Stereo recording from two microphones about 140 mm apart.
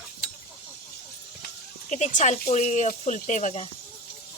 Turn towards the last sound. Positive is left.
turn(degrees=55)  # may be behind; listen again after turning